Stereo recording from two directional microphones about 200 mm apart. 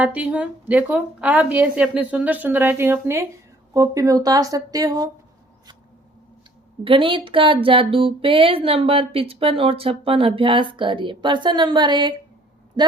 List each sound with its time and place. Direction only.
0.0 s a woman's voice: 5° right (ahead or behind)
6.8 s a man's voice: 25° right (ahead or behind)